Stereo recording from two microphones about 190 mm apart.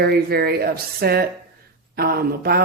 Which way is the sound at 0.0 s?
55° right (ahead or behind).